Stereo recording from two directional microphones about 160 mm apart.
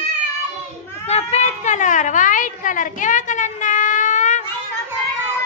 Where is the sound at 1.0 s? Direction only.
40° left (ahead or behind).